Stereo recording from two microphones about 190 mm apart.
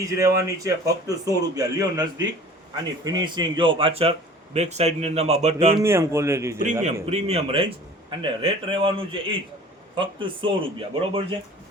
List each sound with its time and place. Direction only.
0.0 s a man's voice: 15° right (ahead or behind); by 5.7 s 35° right (ahead or behind)
5.8 s speech: 15° right (ahead or behind)
6.8 s a man's voice: 35° right (ahead or behind)